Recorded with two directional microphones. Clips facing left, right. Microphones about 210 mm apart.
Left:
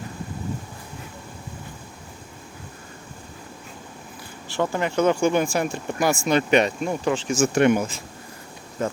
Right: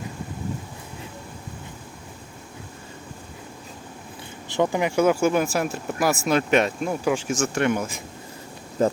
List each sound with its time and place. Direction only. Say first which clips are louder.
4.4 s speech: right 2 dB; 15° right (ahead or behind)
7.3 s speech: left 4 dB; 15° left (ahead or behind)
8.8 s speech: right 5 dB; 35° right (ahead or behind)